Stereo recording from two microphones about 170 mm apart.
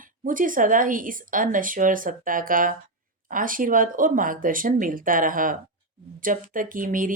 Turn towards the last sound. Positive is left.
turn(degrees=-50)  # may be behind; listen again after turning